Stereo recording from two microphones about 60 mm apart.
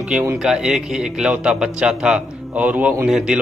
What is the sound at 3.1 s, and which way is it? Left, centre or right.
Speech, centre.